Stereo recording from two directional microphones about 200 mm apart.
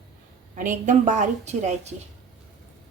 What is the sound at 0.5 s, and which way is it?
Speech, 40° right (ahead or behind).